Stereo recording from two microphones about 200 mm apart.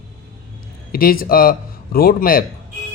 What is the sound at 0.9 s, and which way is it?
A man's voice, 45° left (ahead or behind).